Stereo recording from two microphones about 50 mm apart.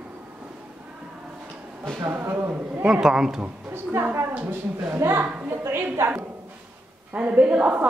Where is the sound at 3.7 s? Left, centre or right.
Right.